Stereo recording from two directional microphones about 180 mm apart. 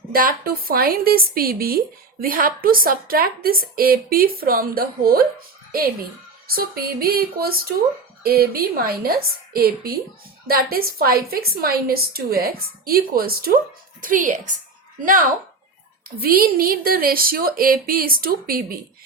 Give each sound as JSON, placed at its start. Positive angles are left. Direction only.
{"t": 0.1, "sound": "a woman's voice", "side_deg": -55}
{"t": 16.0, "sound": "a woman's voice", "side_deg": -55}